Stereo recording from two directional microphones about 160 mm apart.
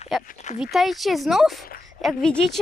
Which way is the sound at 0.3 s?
45° left (ahead or behind).